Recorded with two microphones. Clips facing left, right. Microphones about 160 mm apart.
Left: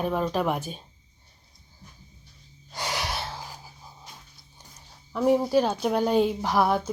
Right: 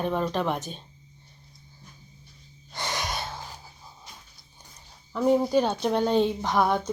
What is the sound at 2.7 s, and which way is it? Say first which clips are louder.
Gasp: left 1 dB; 10° left (ahead or behind).